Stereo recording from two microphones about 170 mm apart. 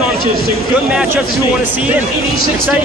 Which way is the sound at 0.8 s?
10° right (ahead or behind).